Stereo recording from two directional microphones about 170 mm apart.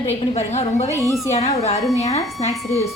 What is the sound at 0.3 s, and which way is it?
A woman's voice, 40° left (ahead or behind).